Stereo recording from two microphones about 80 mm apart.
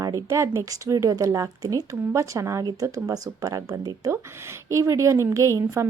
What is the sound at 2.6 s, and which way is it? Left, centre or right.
Speech, right.